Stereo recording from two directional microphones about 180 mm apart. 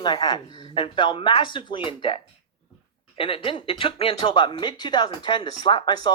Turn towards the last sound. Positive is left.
turn(degrees=25)  # may be behind; listen again after turning